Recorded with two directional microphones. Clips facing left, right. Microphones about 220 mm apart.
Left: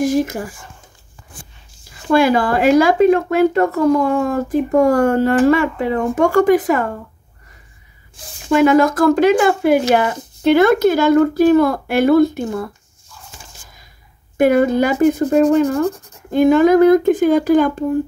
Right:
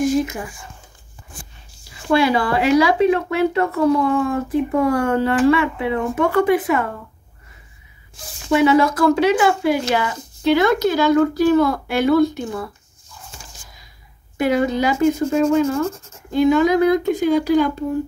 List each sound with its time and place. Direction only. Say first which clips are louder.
1.9 s speech: left 3 dB; 45° left (ahead or behind)
8.6 s speech: left 3 dB; 50° left (ahead or behind)
14.3 s speech: left 5 dB; 50° left (ahead or behind)